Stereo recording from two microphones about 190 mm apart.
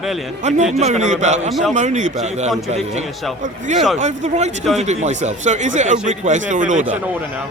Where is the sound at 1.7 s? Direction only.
40° right (ahead or behind).